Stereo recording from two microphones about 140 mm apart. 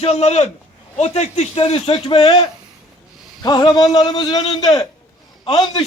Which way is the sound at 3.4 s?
30° left (ahead or behind).